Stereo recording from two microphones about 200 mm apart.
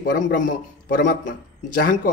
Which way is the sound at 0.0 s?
45° left (ahead or behind).